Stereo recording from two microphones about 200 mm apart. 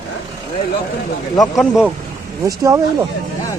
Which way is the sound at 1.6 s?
5° right (ahead or behind).